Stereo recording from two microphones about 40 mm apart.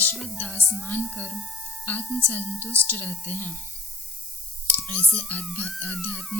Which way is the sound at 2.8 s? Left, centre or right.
Left.